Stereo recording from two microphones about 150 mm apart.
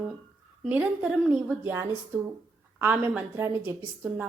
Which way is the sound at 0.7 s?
10° right (ahead or behind).